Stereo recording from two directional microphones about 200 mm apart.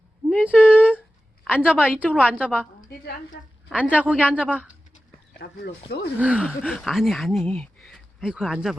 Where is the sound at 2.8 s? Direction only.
50° left (ahead or behind).